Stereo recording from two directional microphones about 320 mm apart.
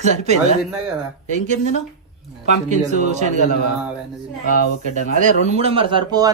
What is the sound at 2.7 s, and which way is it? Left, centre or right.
Speech, right.